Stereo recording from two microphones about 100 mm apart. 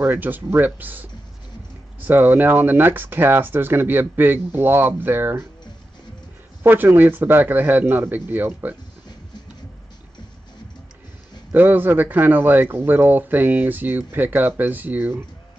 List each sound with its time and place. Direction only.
0.0 s speech: 20° right (ahead or behind)
2.0 s speech: 20° right (ahead or behind)
6.6 s speech: 20° right (ahead or behind)
11.5 s speech: 20° right (ahead or behind)